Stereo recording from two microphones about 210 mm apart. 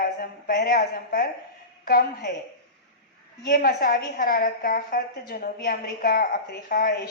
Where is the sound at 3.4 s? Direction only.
45° left (ahead or behind).